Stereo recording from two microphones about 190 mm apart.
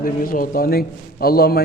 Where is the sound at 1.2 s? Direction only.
55° left (ahead or behind).